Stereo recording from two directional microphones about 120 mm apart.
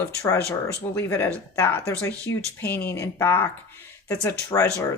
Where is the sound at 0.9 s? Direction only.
20° left (ahead or behind).